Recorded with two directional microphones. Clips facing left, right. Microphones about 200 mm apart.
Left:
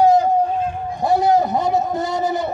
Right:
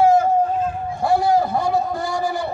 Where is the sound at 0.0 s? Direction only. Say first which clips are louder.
Left 1 dB; 15° left (ahead or behind).